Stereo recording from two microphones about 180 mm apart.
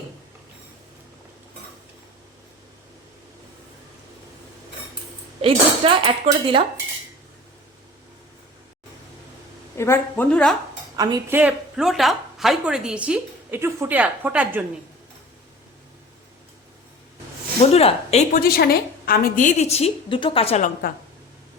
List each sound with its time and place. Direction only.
5.4 s speech: 30° right (ahead or behind)
9.7 s a woman's voice: 15° left (ahead or behind)
10.9 s speech: 20° right (ahead or behind)
11.3 s a woman's voice: 5° right (ahead or behind)
17.7 s speech: 35° left (ahead or behind)
18.3 s a woman's voice: 60° left (ahead or behind); by 20.7 s 35° left (ahead or behind)